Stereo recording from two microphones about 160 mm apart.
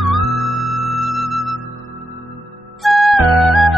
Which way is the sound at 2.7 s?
Centre (ahead or behind).